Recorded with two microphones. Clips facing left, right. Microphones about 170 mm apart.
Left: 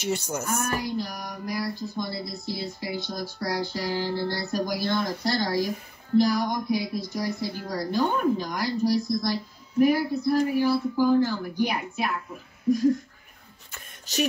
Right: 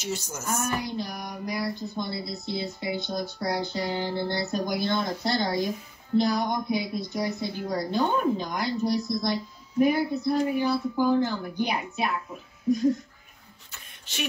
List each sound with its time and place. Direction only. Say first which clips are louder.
0.0 s speech: left 4 dB; 60° left (ahead or behind)
0.7 s a woman's voice: left 2 dB; 20° right (ahead or behind)
13.7 s a sound: left 4 dB; 40° left (ahead or behind)